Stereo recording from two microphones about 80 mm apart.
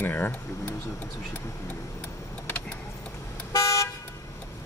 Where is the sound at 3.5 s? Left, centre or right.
Left.